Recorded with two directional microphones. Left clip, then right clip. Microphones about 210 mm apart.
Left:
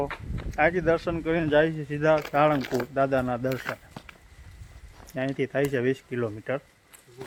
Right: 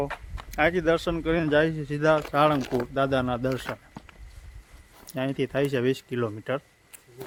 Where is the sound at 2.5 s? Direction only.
Centre (ahead or behind).